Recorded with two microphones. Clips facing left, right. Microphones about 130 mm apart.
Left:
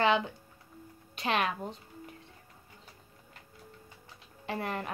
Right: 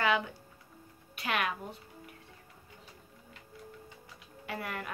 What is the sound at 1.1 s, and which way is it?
Speech, 25° left (ahead or behind).